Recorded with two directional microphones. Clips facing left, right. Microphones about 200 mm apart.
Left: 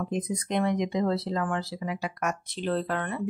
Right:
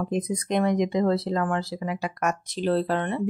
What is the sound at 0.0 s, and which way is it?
Speech, 40° right (ahead or behind).